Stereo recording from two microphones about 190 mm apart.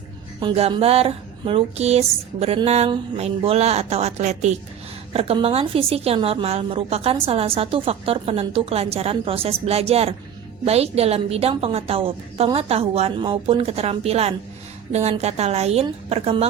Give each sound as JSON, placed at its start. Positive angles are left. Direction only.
{"t": 0.3, "sound": "a woman's voice", "side_deg": -30}